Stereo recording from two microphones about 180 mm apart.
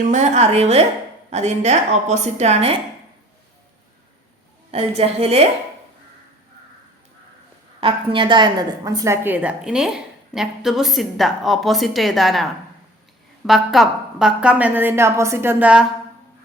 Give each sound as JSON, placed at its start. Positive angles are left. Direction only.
{"t": 0.1, "sound": "a woman's voice", "side_deg": -40}
{"t": 4.7, "sound": "a woman's voice", "side_deg": -35}
{"t": 7.8, "sound": "a woman's voice", "side_deg": -30}